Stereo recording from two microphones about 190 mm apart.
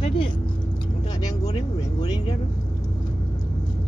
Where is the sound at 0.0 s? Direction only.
25° left (ahead or behind).